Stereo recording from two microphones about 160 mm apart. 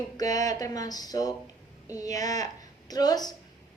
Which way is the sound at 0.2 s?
20° left (ahead or behind).